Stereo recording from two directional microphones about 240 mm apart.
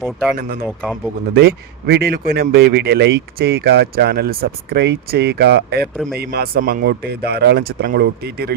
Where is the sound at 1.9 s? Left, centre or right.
Right.